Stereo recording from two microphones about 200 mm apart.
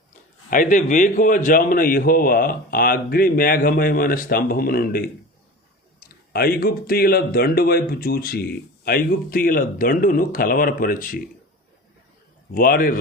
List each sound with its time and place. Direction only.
0.5 s speech: 40° left (ahead or behind)
12.5 s speech: 45° left (ahead or behind)